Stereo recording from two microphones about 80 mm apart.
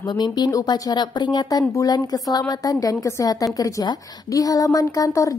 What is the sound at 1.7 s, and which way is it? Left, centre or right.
Speech, left.